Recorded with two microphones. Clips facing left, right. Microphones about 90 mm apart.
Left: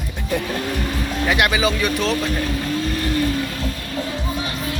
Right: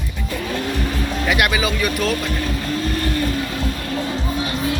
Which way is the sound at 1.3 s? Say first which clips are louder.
Left 1 dB; 25° left (ahead or behind).